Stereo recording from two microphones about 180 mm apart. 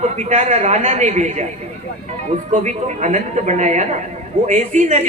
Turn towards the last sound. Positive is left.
turn(degrees=-40)  # may be behind; listen again after turning